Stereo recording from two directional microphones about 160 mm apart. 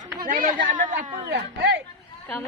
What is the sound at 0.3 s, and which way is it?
Speech, 60° right (ahead or behind).